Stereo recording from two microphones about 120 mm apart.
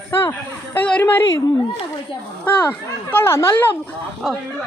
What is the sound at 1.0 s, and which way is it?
Speech, 20° left (ahead or behind).